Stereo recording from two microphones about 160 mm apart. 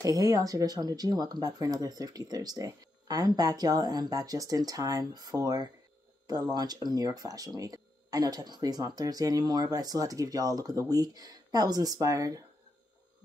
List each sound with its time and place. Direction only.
0.0 s speech: 20° right (ahead or behind)